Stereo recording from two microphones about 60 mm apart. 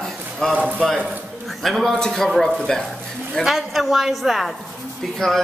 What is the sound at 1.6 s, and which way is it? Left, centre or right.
Speech, centre.